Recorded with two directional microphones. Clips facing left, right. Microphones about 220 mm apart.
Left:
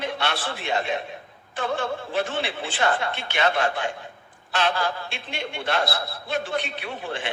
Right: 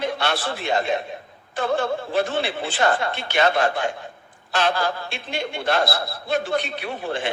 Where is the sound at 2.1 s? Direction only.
40° right (ahead or behind).